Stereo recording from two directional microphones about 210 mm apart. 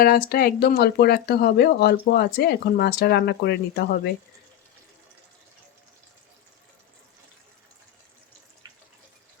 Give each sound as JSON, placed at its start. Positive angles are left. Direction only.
{"t": 0.0, "sound": "speech", "side_deg": 45}